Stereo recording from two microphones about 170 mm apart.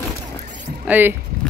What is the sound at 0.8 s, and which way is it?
Rowboat, 10° right (ahead or behind).